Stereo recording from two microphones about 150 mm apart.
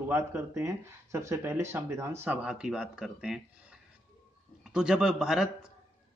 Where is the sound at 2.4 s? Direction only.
5° right (ahead or behind).